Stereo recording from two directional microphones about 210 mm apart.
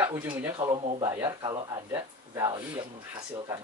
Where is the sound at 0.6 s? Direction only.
25° right (ahead or behind).